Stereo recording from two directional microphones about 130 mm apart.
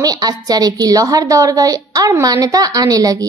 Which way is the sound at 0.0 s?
30° right (ahead or behind).